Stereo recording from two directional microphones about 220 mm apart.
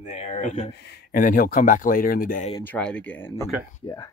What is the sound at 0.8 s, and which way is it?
Speech, 45° left (ahead or behind).